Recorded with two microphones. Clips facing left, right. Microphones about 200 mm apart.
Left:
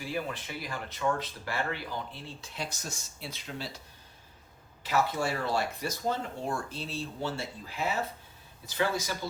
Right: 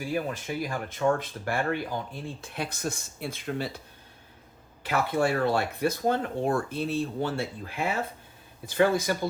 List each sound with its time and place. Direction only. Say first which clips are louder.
0.0 s speech: right 5 dB; 45° right (ahead or behind)
4.8 s speech: right 3 dB; 55° right (ahead or behind)